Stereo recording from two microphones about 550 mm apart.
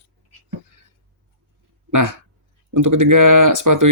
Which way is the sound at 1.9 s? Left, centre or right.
Right.